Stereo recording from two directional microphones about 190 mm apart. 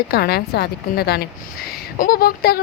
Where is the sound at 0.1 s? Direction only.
55° left (ahead or behind).